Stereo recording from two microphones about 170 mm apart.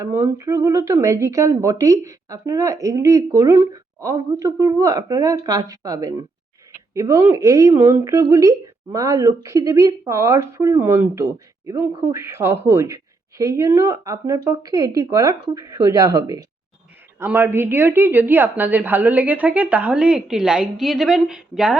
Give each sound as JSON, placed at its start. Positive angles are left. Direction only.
{"t": 0.0, "sound": "speech", "side_deg": -15}